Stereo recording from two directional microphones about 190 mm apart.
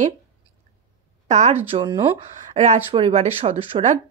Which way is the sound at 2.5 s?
35° right (ahead or behind).